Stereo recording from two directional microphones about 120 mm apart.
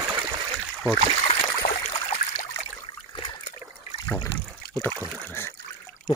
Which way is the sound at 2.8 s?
45° left (ahead or behind).